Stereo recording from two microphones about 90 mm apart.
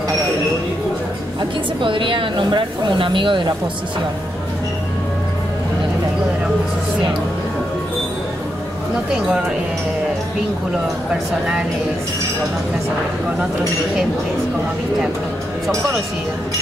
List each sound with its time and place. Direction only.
1.8 s speech: 70° right (ahead or behind)